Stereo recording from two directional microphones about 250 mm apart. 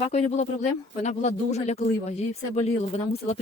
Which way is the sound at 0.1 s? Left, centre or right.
Left.